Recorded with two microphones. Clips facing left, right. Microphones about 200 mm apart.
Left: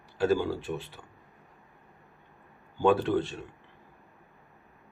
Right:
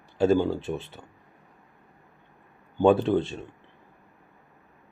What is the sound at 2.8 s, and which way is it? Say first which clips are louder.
Speech: right 4 dB; 25° right (ahead or behind).